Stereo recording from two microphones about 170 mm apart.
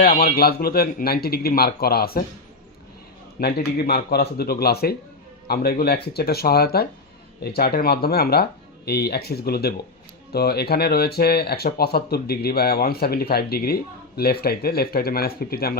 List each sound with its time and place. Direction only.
0.0 s speech: 60° left (ahead or behind)
3.4 s speech: 65° left (ahead or behind)